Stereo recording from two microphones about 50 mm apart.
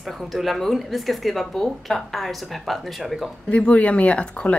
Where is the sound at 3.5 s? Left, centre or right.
Left.